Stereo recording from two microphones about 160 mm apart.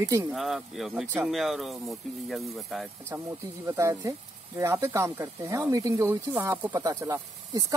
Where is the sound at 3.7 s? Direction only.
20° right (ahead or behind).